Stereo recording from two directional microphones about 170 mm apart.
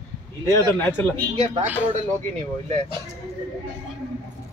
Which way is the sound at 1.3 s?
35° right (ahead or behind).